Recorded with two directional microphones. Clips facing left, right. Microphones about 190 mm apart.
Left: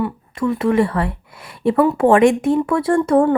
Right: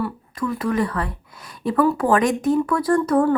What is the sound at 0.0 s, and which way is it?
Speech, 25° left (ahead or behind).